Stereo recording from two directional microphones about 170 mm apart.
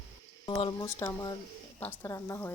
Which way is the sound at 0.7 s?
20° left (ahead or behind).